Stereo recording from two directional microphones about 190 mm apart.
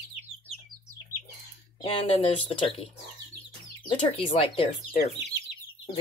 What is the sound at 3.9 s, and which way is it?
Speech, 30° left (ahead or behind).